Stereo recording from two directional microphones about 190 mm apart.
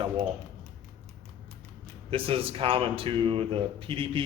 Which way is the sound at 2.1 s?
30° right (ahead or behind).